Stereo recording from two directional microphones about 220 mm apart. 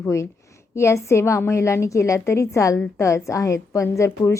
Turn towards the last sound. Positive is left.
turn(degrees=15)  # may be behind; listen again after turning